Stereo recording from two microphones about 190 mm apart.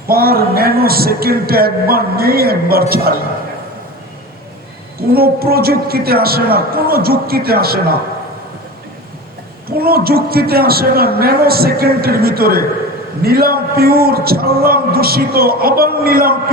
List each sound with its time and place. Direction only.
0.1 s a man's voice: 55° right (ahead or behind)
4.9 s a man's voice: 55° right (ahead or behind)
9.6 s a man's voice: 55° right (ahead or behind)